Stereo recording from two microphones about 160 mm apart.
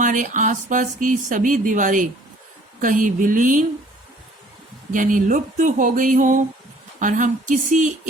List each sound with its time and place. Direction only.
0.0 s speech: 55° right (ahead or behind)
4.9 s speech: 55° right (ahead or behind)